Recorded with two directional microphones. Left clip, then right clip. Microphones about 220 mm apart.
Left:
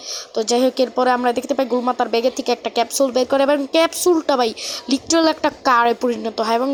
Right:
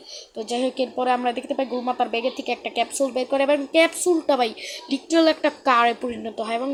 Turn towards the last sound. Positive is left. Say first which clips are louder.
# left 7 dB
turn(degrees=20)  # may be behind; listen again after turning